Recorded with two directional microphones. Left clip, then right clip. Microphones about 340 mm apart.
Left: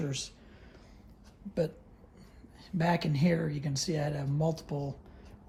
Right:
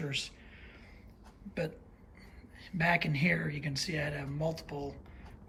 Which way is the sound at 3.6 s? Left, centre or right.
Centre.